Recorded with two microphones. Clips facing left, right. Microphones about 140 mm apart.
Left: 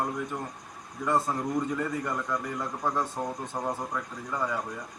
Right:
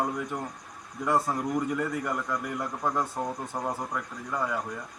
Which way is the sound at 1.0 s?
10° right (ahead or behind).